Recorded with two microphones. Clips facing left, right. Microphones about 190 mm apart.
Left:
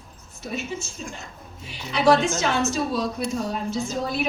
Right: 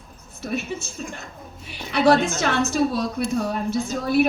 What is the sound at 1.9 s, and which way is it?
Speech, 60° right (ahead or behind).